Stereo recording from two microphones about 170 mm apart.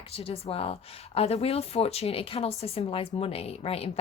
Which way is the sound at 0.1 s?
35° left (ahead or behind).